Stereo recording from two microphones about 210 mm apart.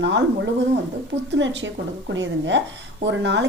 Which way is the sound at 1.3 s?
60° right (ahead or behind).